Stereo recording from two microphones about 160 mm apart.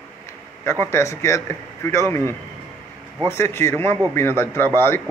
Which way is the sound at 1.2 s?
15° left (ahead or behind).